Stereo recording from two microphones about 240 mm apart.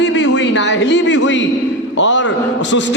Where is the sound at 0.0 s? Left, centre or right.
Left.